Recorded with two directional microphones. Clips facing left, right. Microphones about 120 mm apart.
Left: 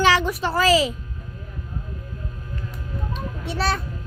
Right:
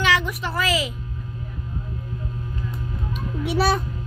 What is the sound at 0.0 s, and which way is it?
Speech, 35° left (ahead or behind).